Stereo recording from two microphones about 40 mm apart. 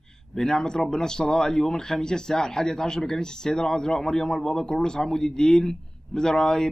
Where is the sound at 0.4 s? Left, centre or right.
Centre.